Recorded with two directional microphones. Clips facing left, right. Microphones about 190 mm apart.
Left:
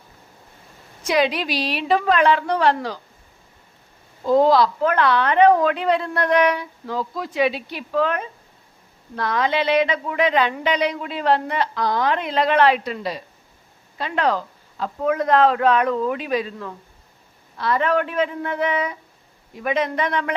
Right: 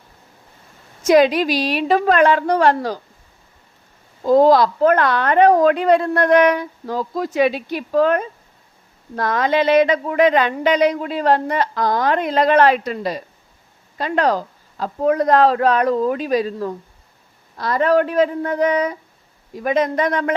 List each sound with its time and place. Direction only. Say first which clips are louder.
1.0 s speech: right 7 dB; 45° right (ahead or behind)
4.3 s speech: right 3 dB; 45° right (ahead or behind)